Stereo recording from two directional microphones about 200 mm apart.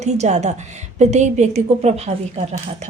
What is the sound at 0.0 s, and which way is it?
A woman's voice, 35° right (ahead or behind).